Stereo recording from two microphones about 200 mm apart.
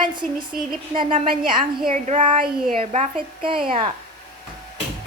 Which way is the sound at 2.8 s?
30° right (ahead or behind).